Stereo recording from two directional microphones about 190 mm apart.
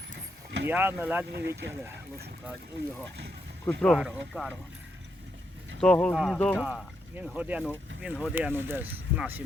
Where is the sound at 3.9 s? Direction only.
5° right (ahead or behind).